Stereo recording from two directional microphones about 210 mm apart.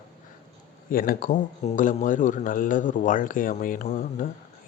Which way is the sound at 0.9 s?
40° left (ahead or behind).